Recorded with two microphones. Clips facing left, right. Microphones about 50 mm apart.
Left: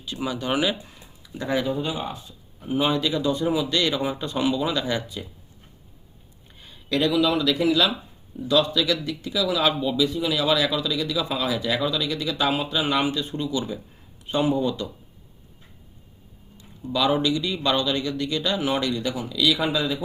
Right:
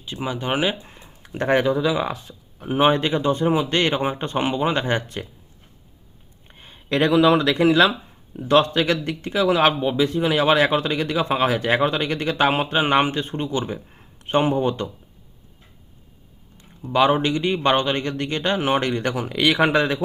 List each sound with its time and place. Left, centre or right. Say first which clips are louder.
0.0 s speech: right 1 dB; right
1.3 s speech: right 6 dB; right
1.7 s speech: right 6 dB; right
2.6 s speech: right 5 dB; right
6.5 s speech: right 2 dB; right
16.6 s speech: right 6 dB; right